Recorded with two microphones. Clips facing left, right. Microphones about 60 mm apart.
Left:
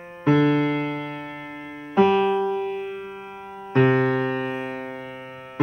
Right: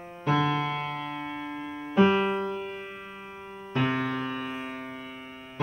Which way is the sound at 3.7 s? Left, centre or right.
Left.